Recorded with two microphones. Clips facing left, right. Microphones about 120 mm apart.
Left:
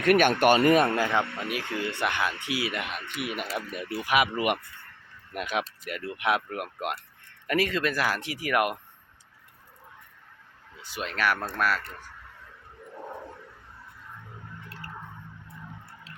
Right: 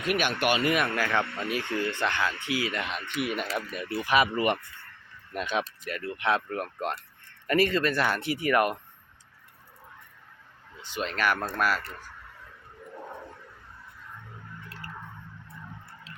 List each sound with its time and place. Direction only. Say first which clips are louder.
0.0 s speech: left 6 dB; 55° left (ahead or behind); by 0.9 s 35° left (ahead or behind)
0.9 s speech: left 2 dB; 20° left (ahead or behind)
1.2 s speech: right 1 dB; 5° left (ahead or behind)
2.9 s speech: right 3 dB; 5° left (ahead or behind)
10.8 s speech: even; 5° left (ahead or behind)